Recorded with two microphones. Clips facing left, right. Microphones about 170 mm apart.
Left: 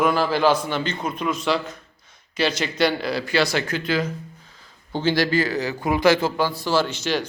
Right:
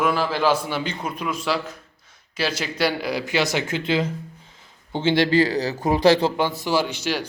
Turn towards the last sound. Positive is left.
turn(degrees=-10)  # may be behind; listen again after turning